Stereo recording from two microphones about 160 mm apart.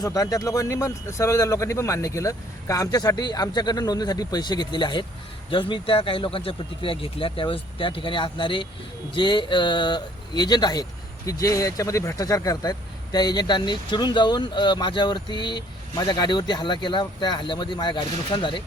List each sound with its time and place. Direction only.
0.0 s speech: 20° left (ahead or behind)